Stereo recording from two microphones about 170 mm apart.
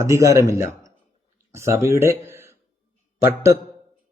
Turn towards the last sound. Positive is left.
turn(degrees=-15)  # may be behind; listen again after turning